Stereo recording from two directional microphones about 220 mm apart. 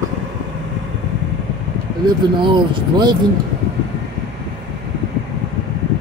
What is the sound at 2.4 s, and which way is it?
Speech, 20° right (ahead or behind).